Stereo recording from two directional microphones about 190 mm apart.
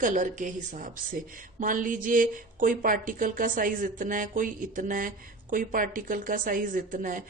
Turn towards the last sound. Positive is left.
turn(degrees=-45)  # may be behind; listen again after turning